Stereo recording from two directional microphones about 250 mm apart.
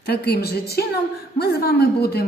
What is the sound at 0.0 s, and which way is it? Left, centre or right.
A woman's voice, left.